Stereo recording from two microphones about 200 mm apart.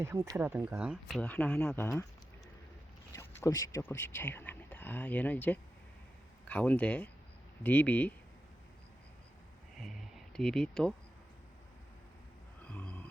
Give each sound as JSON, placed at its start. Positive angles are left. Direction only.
{"t": 0.0, "sound": "speech", "side_deg": -15}
{"t": 3.1, "sound": "speech", "side_deg": 15}
{"t": 9.8, "sound": "speech", "side_deg": 0}
{"t": 12.6, "sound": "a sound", "side_deg": 5}